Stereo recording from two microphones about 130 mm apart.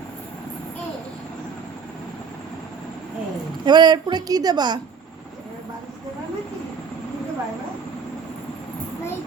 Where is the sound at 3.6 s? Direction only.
35° right (ahead or behind).